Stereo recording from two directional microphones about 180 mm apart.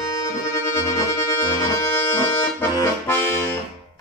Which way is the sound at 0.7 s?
15° left (ahead or behind).